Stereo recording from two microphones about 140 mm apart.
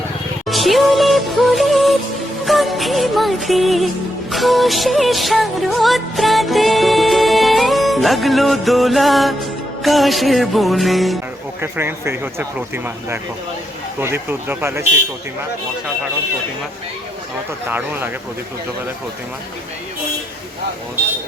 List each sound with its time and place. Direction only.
0.4 s music: centre (ahead or behind)
11.6 s speech: 15° right (ahead or behind)
17.7 s speech: 15° right (ahead or behind)